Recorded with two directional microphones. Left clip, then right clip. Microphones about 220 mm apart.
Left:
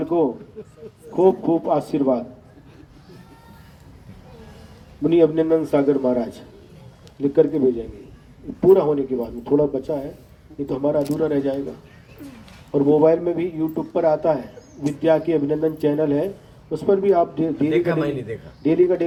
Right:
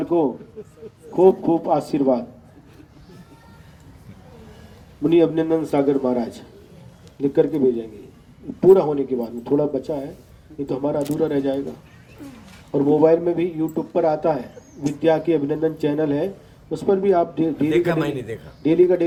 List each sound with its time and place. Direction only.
0.0 s speech: 40° right (ahead or behind)
0.6 s speech: 15° left (ahead or behind)
1.1 s a man's voice: 35° right (ahead or behind)
5.0 s a man's voice: 40° right (ahead or behind)
11.2 s a man's voice: 40° right (ahead or behind)
12.7 s a man's voice: 35° right (ahead or behind)